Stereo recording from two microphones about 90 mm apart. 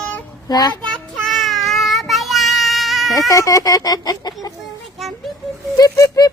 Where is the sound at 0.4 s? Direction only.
45° left (ahead or behind).